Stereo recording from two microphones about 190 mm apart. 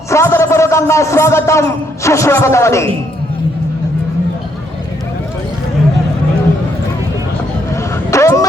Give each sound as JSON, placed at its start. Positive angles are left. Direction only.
{"t": 0.1, "sound": "a man's voice", "side_deg": 15}
{"t": 8.1, "sound": "vehicle", "side_deg": 15}